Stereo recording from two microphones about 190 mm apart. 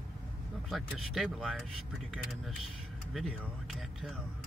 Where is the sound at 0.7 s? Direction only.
Centre (ahead or behind).